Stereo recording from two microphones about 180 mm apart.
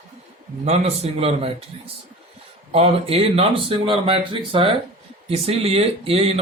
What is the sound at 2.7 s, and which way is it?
Speech, 30° right (ahead or behind).